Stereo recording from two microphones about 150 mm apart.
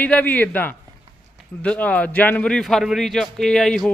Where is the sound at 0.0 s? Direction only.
10° left (ahead or behind).